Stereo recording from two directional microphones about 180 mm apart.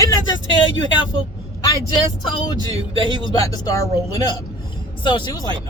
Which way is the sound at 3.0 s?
20° left (ahead or behind).